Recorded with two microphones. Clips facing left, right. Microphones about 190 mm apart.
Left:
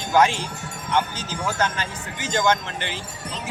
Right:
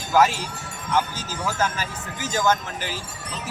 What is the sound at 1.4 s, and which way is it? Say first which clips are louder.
Speech: even; 5° right (ahead or behind).